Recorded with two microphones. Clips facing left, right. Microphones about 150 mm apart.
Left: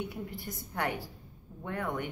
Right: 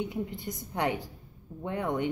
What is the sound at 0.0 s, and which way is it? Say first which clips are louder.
A woman's voice: right 5 dB; 20° right (ahead or behind).